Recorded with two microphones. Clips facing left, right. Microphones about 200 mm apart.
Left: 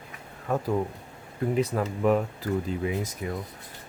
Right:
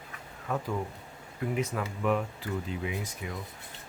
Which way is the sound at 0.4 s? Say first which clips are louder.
Left 6 dB; 40° left (ahead or behind).